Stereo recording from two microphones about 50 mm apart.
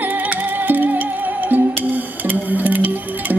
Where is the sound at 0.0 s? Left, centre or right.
Right.